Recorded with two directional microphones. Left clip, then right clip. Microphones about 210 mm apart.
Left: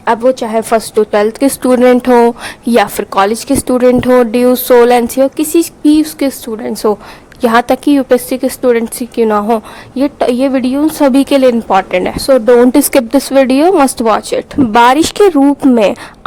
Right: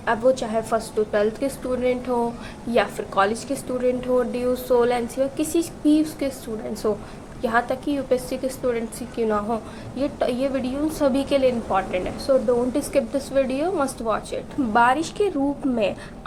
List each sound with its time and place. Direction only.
0.0 s a woman's voice: 40° left (ahead or behind)